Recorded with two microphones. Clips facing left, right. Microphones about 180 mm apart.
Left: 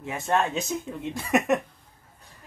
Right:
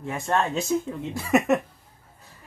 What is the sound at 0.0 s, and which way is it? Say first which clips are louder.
Speech: even; 5° left (ahead or behind).